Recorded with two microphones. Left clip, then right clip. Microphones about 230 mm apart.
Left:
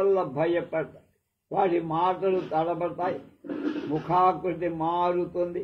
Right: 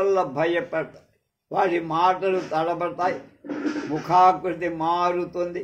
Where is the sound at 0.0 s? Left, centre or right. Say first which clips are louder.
Right 3 dB; right.